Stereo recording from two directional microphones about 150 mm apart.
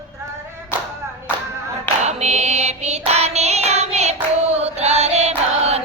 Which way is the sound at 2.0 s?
50° right (ahead or behind).